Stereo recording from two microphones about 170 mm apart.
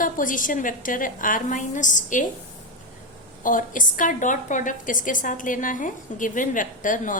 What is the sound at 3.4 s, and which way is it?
A woman's voice, 50° left (ahead or behind).